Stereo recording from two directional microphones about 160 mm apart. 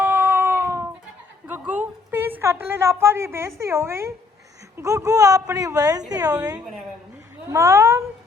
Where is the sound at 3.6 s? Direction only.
15° right (ahead or behind).